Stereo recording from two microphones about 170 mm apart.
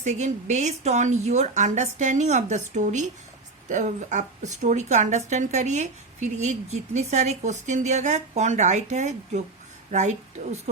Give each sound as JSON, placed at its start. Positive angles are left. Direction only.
{"t": 0.0, "sound": "a woman's voice", "side_deg": -45}